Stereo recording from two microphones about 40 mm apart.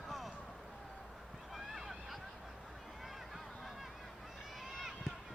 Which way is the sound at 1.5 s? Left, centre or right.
Centre.